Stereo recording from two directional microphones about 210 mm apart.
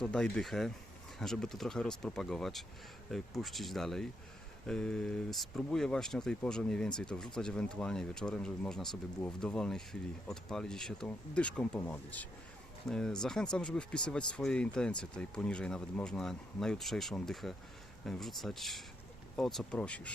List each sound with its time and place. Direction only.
0.0 s speech: 5° left (ahead or behind)